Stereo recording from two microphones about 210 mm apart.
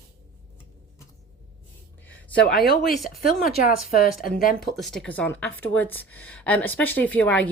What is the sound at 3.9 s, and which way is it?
Speech, 45° left (ahead or behind).